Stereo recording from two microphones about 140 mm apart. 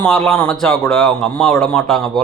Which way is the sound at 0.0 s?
5° left (ahead or behind).